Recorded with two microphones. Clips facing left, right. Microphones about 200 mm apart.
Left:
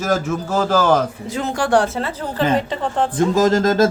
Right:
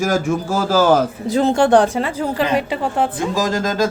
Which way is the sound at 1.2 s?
30° right (ahead or behind).